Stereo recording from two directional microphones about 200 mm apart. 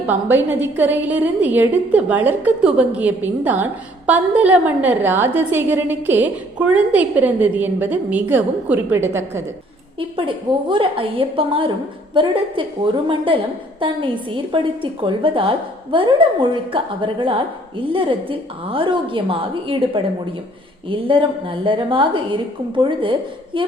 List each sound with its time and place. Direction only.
0.0 s a woman's voice: 10° right (ahead or behind)
10.2 s a woman's voice: 25° right (ahead or behind)